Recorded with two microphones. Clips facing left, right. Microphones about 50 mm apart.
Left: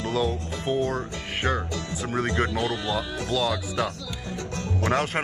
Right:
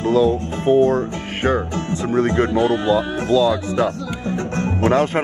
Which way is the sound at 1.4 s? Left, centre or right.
Right.